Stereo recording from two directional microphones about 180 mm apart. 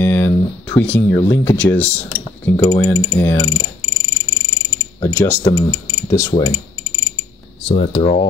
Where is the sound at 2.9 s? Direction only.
25° left (ahead or behind).